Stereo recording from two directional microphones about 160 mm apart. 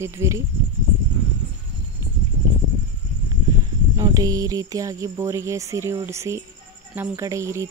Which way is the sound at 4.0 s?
20° right (ahead or behind).